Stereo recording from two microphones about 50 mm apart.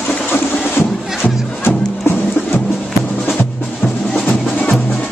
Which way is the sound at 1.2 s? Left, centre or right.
Left.